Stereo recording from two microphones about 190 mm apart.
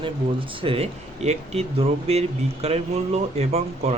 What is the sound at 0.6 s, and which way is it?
Speech, 30° right (ahead or behind).